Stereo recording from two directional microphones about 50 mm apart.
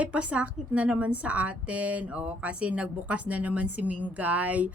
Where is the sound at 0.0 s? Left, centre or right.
Right.